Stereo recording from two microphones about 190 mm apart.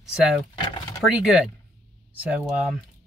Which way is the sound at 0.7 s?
20° left (ahead or behind).